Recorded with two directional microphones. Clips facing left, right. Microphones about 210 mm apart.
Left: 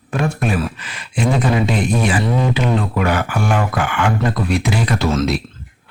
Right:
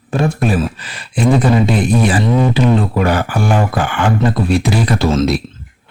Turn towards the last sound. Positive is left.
turn(degrees=-30)  # may be behind; listen again after turning